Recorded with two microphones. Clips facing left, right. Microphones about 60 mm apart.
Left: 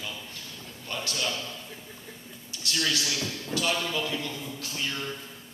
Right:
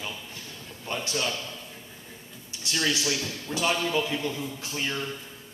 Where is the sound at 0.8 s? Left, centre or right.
Right.